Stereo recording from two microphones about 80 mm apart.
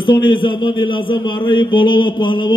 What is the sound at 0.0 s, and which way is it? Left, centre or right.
Speech, left.